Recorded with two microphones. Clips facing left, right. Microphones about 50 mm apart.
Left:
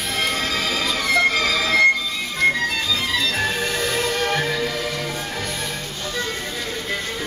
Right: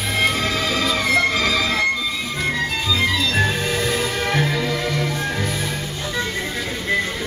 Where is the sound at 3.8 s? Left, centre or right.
Centre.